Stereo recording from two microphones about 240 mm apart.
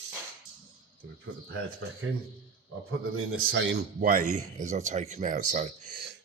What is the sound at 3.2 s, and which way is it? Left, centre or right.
Speech, right.